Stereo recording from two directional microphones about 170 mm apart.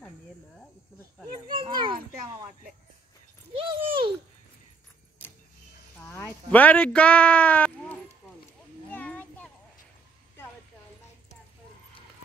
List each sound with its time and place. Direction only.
1.5 s children playing: 30° right (ahead or behind)
3.5 s a sound: 30° right (ahead or behind)
6.1 s speech: 10° left (ahead or behind)
8.9 s children playing: 10° left (ahead or behind)